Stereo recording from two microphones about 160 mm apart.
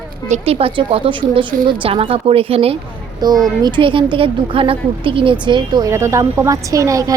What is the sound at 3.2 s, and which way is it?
Speech, 25° right (ahead or behind).